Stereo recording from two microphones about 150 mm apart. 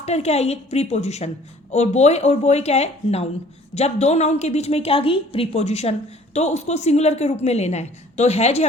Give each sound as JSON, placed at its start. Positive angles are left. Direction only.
{"t": 0.0, "sound": "a woman's voice", "side_deg": 45}